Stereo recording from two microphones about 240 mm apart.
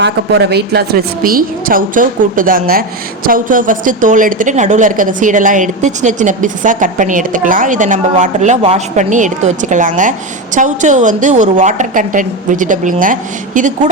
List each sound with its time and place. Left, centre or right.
0.0 s a woman's voice: right